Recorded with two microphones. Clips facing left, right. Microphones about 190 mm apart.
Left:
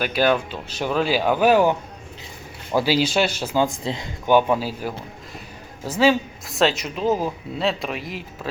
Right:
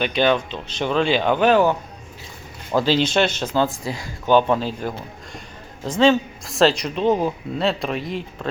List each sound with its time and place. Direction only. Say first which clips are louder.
0.0 s speech: right 1 dB; 5° left (ahead or behind)
2.7 s speech: right 1 dB; 10° left (ahead or behind)
3.8 s speech: left 1 dB; 20° left (ahead or behind)
4.3 s speech: right 1 dB; 10° left (ahead or behind)